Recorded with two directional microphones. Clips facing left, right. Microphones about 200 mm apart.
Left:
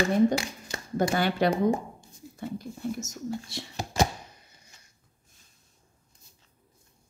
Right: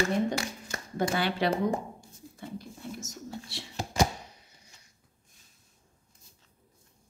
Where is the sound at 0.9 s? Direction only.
45° left (ahead or behind).